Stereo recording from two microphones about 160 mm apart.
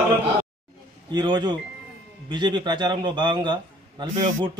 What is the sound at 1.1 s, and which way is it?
A man's voice, 25° right (ahead or behind).